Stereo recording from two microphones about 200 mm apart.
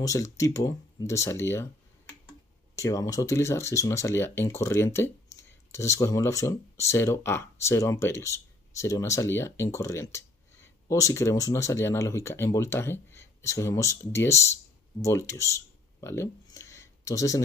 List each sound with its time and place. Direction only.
0.0 s speech: 15° left (ahead or behind)
2.7 s speech: 15° left (ahead or behind)